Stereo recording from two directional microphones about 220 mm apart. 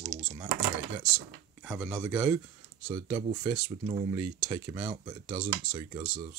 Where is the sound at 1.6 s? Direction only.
5° right (ahead or behind).